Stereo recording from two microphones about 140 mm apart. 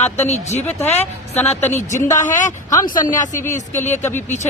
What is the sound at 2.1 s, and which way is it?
Speech, 65° left (ahead or behind).